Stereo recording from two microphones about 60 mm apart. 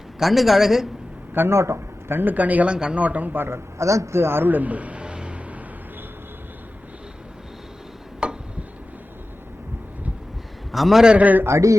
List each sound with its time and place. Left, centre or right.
0.2 s a man's voice: centre
1.3 s a man's voice: right
1.5 s speech: right
2.7 s a man's voice: centre
3.0 s a man's voice: right
8.2 s a sound: centre
10.7 s a man's voice: centre
11.0 s a man's voice: centre
11.4 s a man's voice: right